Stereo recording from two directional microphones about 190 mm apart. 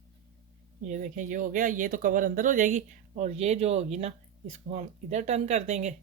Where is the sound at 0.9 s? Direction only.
40° right (ahead or behind).